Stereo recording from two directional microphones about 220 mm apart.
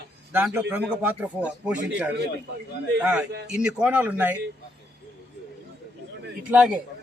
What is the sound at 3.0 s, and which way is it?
A man's voice, 5° right (ahead or behind).